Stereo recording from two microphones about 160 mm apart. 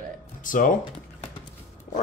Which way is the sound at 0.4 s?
55° left (ahead or behind).